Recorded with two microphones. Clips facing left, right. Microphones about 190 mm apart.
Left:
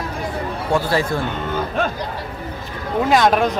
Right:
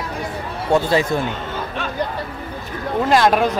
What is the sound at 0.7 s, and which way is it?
Speech, 20° right (ahead or behind).